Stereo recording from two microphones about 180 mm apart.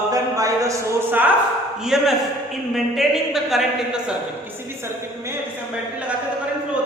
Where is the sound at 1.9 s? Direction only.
Centre (ahead or behind).